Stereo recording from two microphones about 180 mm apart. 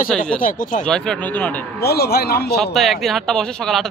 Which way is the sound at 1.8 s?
60° left (ahead or behind).